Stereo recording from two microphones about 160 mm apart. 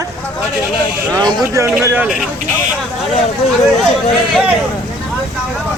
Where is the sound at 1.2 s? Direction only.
20° right (ahead or behind).